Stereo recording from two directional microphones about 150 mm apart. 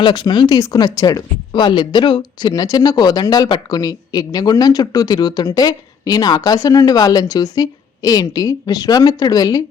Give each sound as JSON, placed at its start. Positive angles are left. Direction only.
{"t": 0.0, "sound": "speech", "side_deg": 30}